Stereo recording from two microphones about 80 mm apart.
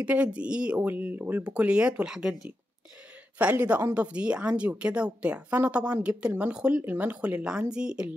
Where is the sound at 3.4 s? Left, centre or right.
Centre.